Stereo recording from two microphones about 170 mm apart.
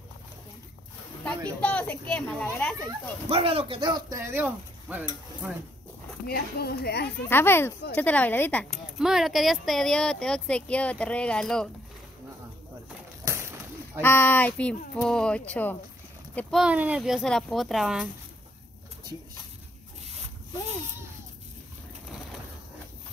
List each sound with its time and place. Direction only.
1.2 s speech: 10° left (ahead or behind)
3.3 s speech: 35° right (ahead or behind); by 5.0 s 10° right (ahead or behind)
6.2 s a woman's voice: 65° left (ahead or behind)
7.2 s speech: 15° left (ahead or behind)
9.0 s speech: centre (ahead or behind)
13.2 s a sound: 15° right (ahead or behind)
14.0 s speech: 10° left (ahead or behind)